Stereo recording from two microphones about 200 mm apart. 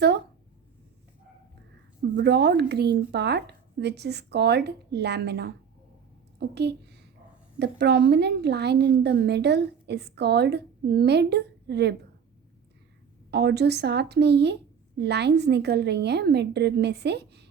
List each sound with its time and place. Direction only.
2.1 s a woman's voice: 55° right (ahead or behind)
13.3 s a woman's voice: 55° right (ahead or behind)